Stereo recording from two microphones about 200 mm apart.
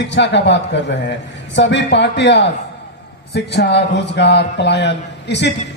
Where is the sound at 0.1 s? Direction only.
60° left (ahead or behind).